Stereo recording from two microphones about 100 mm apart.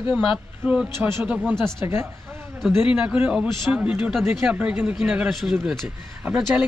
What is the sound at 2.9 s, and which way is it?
A man's voice, 10° right (ahead or behind).